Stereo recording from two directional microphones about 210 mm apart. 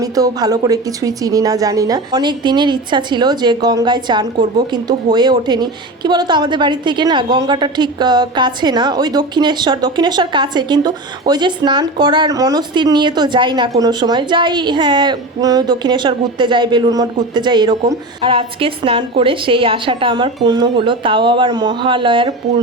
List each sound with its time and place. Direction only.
0.0 s a woman's voice: 15° right (ahead or behind)